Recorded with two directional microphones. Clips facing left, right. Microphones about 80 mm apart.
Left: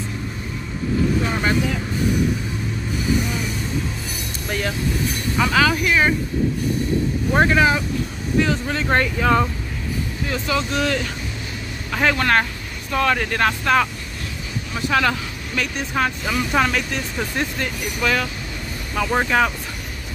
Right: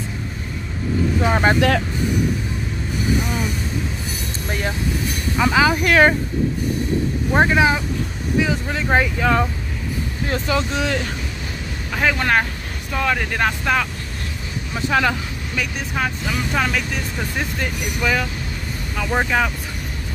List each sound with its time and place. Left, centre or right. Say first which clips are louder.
1.3 s speech: right 4 dB; right
4.5 s vehicle: even; centre
5.4 s speech: right 1 dB; centre
5.9 s speech: right 4 dB; right
7.3 s speech: right 1 dB; centre
10.2 s speech: right 2 dB; right
11.9 s speech: even; centre
14.9 s speech: right 1 dB; centre
16.0 s speech: left 2 dB; centre
17.6 s speech: even; centre